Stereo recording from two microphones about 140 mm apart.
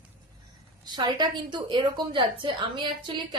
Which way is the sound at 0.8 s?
30° right (ahead or behind).